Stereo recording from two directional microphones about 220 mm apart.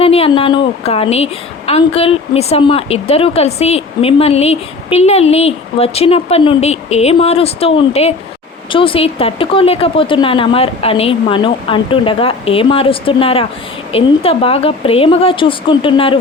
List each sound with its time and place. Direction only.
0.0 s a woman's voice: 25° left (ahead or behind)